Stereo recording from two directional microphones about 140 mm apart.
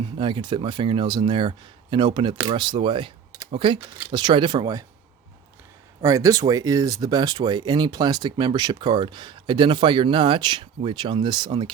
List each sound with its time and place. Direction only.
0.2 s speech: 35° right (ahead or behind)
6.0 s speech: 25° right (ahead or behind)